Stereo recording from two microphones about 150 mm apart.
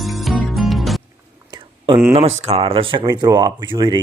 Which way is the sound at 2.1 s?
40° right (ahead or behind).